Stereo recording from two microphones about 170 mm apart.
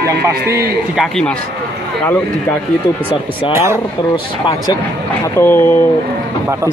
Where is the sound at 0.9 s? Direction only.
5° left (ahead or behind).